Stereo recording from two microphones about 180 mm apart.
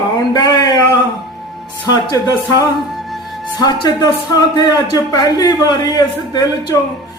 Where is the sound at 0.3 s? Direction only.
20° left (ahead or behind).